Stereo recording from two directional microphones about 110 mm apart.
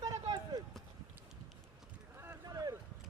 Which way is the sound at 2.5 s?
35° right (ahead or behind).